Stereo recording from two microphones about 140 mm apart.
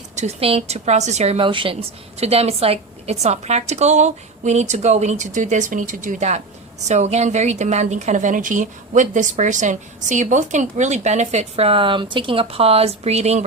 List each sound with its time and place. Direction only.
0.2 s a woman's voice: 45° right (ahead or behind)